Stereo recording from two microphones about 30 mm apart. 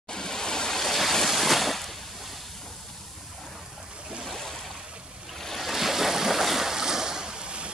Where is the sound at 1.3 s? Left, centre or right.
Centre.